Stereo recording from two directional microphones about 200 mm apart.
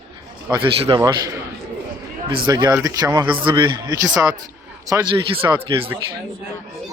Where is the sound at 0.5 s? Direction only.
25° right (ahead or behind).